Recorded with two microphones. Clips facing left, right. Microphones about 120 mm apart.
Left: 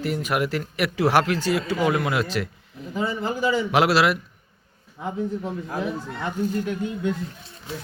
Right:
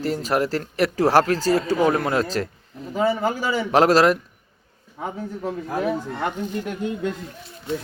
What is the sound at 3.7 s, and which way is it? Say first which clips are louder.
Speech: right 5 dB; 40° right (ahead or behind).